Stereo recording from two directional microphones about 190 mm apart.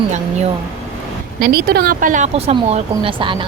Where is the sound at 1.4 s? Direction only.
50° right (ahead or behind).